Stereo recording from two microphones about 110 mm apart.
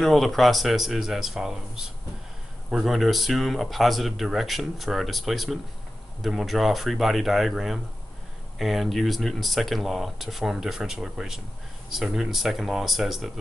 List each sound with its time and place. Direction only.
0.0 s speech: centre (ahead or behind)